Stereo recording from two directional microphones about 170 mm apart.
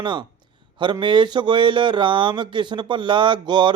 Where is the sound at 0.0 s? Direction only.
25° right (ahead or behind).